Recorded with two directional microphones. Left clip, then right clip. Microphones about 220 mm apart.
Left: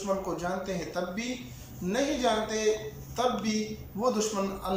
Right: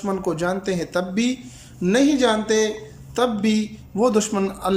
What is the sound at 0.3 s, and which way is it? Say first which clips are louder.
A man's voice: right 9 dB; 45° right (ahead or behind).